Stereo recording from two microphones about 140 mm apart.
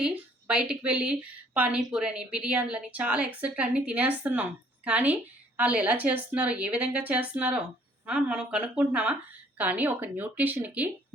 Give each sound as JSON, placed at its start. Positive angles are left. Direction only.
{"t": 0.0, "sound": "a woman's voice", "side_deg": -5}